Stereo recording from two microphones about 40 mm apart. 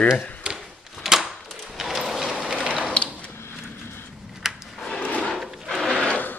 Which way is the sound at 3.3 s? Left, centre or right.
Left.